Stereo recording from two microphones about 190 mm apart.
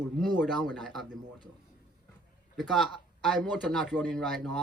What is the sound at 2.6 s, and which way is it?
Speech, centre (ahead or behind).